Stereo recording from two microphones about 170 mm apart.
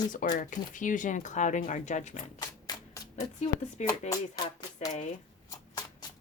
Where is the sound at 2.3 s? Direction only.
25° left (ahead or behind).